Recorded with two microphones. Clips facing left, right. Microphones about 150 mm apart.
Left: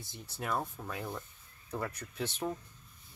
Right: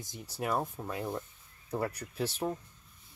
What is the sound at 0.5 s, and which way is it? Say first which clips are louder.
Speech: right 3 dB; 20° right (ahead or behind).